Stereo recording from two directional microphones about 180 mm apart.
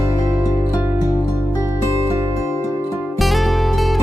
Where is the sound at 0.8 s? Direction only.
10° right (ahead or behind).